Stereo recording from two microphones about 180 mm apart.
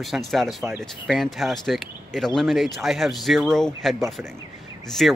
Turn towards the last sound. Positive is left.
turn(degrees=0)  # may be behind; listen again after turning